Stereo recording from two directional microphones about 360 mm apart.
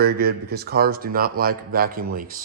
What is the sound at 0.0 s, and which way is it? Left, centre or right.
Speech, right.